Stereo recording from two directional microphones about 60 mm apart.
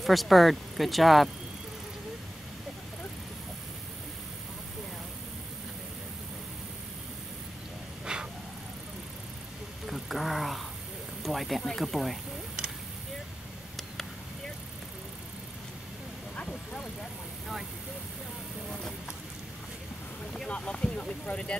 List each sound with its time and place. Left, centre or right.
0.0 s speech: centre
8.0 s vehicle: centre
9.8 s vehicle: centre
11.2 s a sound: centre
11.6 s speech: centre
20.3 s vehicle: centre